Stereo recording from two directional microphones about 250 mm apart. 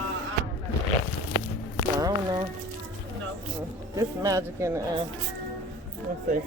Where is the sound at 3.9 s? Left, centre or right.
Centre.